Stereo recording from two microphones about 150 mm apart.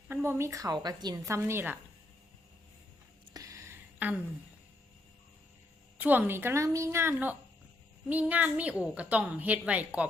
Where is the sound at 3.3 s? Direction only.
20° right (ahead or behind).